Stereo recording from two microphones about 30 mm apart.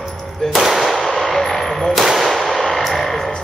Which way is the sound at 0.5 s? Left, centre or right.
Centre.